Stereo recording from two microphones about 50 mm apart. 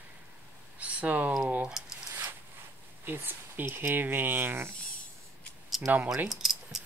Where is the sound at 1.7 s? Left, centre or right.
Centre.